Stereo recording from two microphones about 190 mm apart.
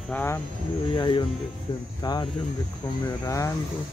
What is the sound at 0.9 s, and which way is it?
Speech, 25° left (ahead or behind).